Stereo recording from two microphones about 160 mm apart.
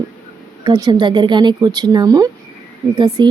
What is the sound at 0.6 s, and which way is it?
A woman's voice, 25° right (ahead or behind).